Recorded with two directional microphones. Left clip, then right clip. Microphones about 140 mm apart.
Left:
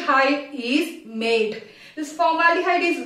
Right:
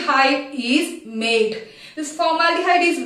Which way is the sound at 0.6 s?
25° left (ahead or behind).